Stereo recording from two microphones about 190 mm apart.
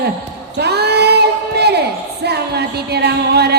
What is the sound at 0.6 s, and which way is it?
Crowd, 60° right (ahead or behind).